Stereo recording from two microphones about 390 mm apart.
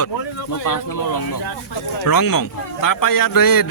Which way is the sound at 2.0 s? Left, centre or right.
Left.